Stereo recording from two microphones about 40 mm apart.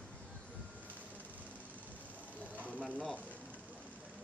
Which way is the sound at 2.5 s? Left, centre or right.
Right.